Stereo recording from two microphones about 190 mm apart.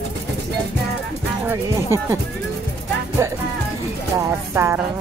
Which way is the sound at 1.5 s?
15° right (ahead or behind).